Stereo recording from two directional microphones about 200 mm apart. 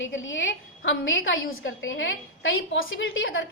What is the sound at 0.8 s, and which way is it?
A woman's voice, 70° left (ahead or behind).